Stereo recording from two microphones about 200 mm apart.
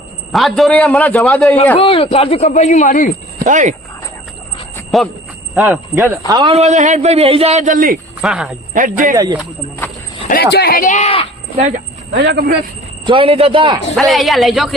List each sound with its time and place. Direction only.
0.3 s a man's voice: centre (ahead or behind)
1.8 s speech: 25° left (ahead or behind)
3.4 s a man's voice: 40° right (ahead or behind)
4.9 s a man's voice: centre (ahead or behind); by 7.9 s 40° right (ahead or behind)
8.2 s a man's voice: 5° right (ahead or behind)
8.7 s a man's voice: 40° right (ahead or behind)
9.1 s speech: 20° right (ahead or behind)
10.2 s speech: 50° left (ahead or behind); by 11.3 s 30° left (ahead or behind)
12.1 s speech: 60° right (ahead or behind)
13.1 s speech: 25° right (ahead or behind)
13.9 s a man's voice: centre (ahead or behind)